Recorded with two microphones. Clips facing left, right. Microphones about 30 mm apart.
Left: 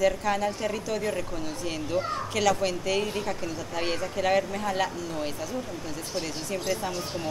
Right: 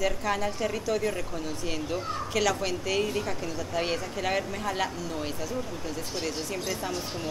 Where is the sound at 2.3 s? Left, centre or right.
Centre.